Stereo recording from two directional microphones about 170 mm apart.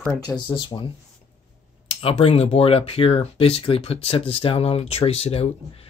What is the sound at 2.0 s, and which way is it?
Speech, 35° left (ahead or behind).